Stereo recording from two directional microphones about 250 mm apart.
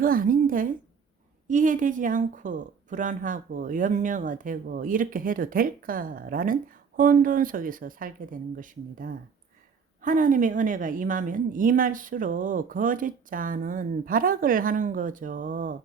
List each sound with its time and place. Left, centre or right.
0.0 s a woman's voice: right